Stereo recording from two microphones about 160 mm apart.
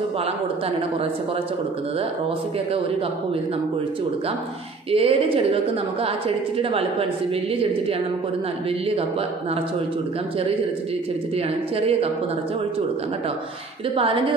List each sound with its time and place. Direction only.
4.9 s a woman's voice: 35° right (ahead or behind)
8.6 s a woman's voice: 40° right (ahead or behind)
11.3 s a woman's voice: 40° right (ahead or behind)